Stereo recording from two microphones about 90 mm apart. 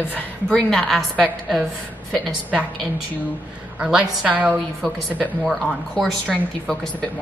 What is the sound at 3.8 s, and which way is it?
Speech, 5° right (ahead or behind).